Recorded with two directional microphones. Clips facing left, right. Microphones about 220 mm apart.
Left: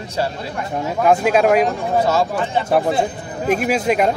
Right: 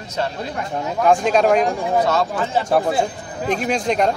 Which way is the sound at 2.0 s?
25° left (ahead or behind).